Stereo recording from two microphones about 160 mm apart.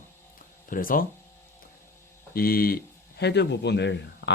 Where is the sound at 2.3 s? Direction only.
65° left (ahead or behind).